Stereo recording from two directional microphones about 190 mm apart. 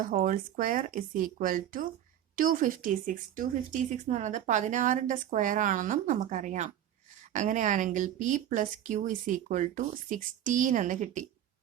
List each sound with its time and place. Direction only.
0.0 s speech: 45° right (ahead or behind)